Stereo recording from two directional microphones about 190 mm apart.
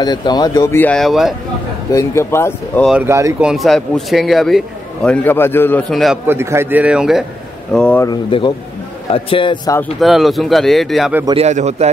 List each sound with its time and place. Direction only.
0.0 s speech: 20° left (ahead or behind); by 1.3 s centre (ahead or behind)
1.9 s speech: 15° left (ahead or behind)
2.9 s speech: 10° right (ahead or behind)
3.4 s a man's voice: centre (ahead or behind)
6.2 s speech: 15° right (ahead or behind)
7.7 s speech: 5° left (ahead or behind)
8.1 s a man's voice: 25° left (ahead or behind)
9.8 s a man's voice: centre (ahead or behind)
11.2 s a man's voice: 35° right (ahead or behind)